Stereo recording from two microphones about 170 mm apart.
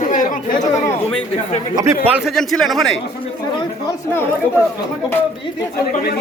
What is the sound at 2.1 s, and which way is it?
Speech, centre (ahead or behind).